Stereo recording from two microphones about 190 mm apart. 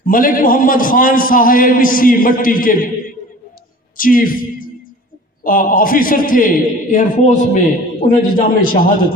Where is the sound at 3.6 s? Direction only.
45° left (ahead or behind).